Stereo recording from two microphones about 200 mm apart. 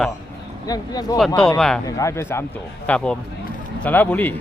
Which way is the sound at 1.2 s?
Centre (ahead or behind).